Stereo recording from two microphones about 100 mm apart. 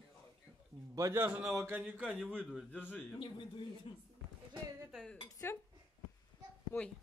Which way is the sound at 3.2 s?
55° left (ahead or behind).